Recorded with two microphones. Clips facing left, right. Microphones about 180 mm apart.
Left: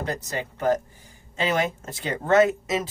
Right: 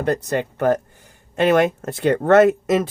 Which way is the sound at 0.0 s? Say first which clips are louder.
Right 9 dB; 60° right (ahead or behind).